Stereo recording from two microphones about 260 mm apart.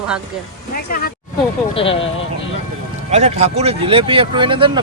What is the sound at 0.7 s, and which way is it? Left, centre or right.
Speech, left.